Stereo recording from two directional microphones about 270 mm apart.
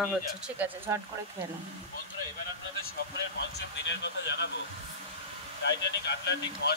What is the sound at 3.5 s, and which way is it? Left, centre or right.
Speech, left.